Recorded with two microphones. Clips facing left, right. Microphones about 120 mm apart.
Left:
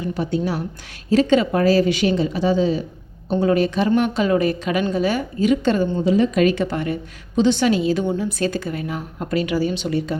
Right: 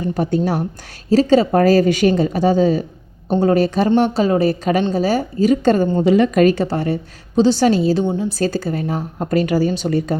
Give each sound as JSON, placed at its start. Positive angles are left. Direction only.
{"t": 0.0, "sound": "a woman's voice", "side_deg": -45}
{"t": 1.1, "sound": "a woman's voice", "side_deg": -35}
{"t": 6.0, "sound": "a woman's voice", "side_deg": -65}
{"t": 6.3, "sound": "a woman's voice", "side_deg": -45}
{"t": 8.0, "sound": "a woman's voice", "side_deg": -25}
{"t": 8.4, "sound": "a woman's voice", "side_deg": -35}